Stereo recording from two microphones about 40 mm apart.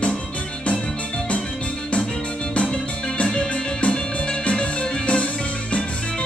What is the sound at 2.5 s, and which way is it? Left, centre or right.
Music, left.